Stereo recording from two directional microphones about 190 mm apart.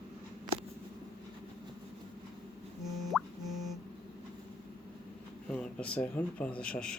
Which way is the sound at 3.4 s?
20° right (ahead or behind).